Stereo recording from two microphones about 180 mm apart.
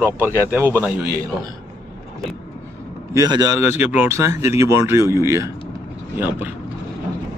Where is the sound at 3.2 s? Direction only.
20° right (ahead or behind).